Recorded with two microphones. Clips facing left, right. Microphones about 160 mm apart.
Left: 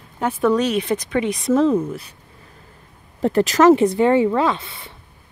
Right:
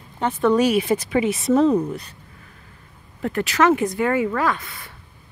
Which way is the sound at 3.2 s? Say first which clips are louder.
Left 5 dB; 35° left (ahead or behind).